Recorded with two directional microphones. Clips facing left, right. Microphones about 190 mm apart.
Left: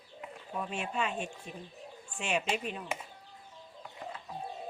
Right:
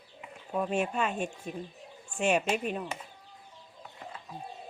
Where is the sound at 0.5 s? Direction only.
50° right (ahead or behind).